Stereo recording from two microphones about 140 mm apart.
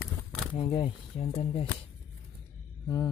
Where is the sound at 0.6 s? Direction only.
35° left (ahead or behind).